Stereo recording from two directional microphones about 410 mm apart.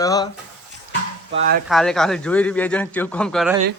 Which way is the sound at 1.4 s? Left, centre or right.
Right.